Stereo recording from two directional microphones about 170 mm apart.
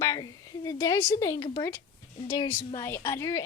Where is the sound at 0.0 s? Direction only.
20° left (ahead or behind).